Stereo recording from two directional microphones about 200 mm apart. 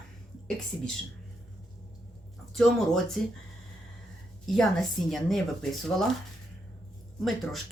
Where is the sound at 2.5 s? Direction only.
Centre (ahead or behind).